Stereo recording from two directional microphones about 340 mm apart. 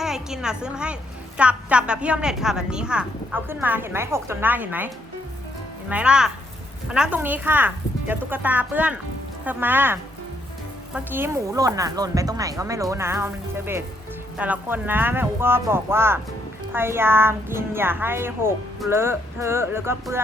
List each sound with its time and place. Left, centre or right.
0.0 s a woman's voice: centre
5.9 s a woman's voice: centre